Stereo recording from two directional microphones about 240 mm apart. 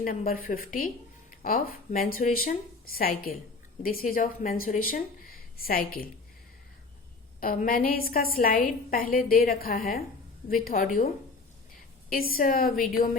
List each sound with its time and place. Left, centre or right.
0.0 s a woman's voice: left
7.3 s a woman's voice: left